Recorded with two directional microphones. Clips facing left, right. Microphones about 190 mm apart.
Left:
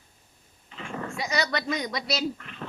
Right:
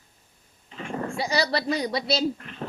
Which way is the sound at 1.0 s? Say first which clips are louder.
Right 3 dB; 30° right (ahead or behind).